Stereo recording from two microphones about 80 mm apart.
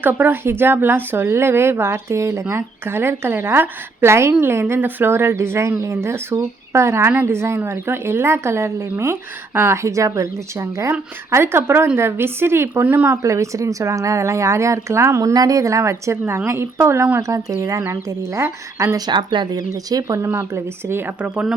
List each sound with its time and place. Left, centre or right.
0.0 s a woman's voice: right
13.1 s speech: right
17.2 s speech: right
18.9 s speech: right